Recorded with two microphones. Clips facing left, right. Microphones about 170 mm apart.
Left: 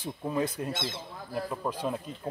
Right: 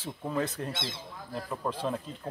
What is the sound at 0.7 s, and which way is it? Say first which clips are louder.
Speech: left 3 dB; 50° left (ahead or behind).